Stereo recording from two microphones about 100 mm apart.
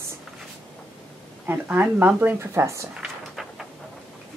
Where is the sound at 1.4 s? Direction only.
20° right (ahead or behind).